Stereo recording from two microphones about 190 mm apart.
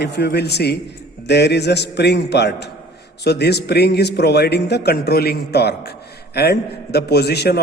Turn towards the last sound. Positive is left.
turn(degrees=55)  # may be behind; listen again after turning